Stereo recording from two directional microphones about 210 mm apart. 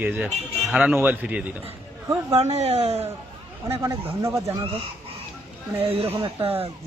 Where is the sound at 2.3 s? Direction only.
30° right (ahead or behind).